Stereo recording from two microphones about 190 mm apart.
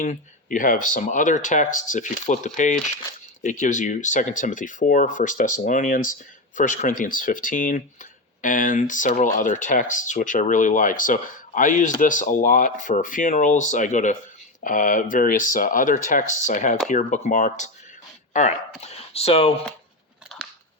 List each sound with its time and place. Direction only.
0.0 s speech: 45° left (ahead or behind)